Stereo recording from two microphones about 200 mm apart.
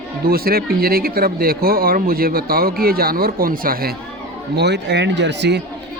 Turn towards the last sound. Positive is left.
turn(degrees=-60)  # may be behind; listen again after turning